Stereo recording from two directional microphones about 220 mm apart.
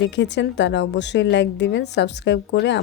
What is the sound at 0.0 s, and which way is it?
A woman's voice, 55° left (ahead or behind).